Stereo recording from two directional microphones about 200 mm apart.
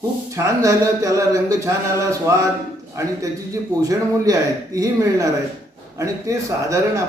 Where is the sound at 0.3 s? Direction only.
15° right (ahead or behind).